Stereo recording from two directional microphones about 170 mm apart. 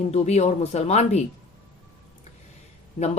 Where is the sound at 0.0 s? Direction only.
40° left (ahead or behind).